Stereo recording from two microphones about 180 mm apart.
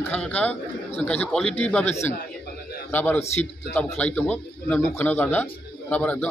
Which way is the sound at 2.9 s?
10° left (ahead or behind).